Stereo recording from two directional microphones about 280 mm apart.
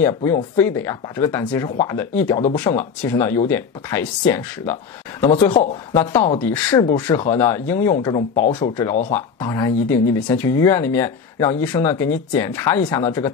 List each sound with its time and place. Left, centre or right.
0.0 s speech: centre
9.9 s speech: left
10.2 s speech: centre